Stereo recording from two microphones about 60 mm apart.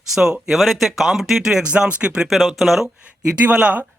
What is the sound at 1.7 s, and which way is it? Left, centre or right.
Speech, centre.